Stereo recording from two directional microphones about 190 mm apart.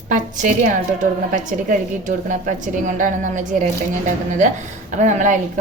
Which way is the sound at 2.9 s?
45° right (ahead or behind).